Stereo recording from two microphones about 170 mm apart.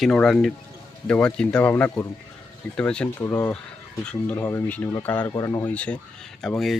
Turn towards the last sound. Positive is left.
turn(degrees=0)  # may be behind; listen again after turning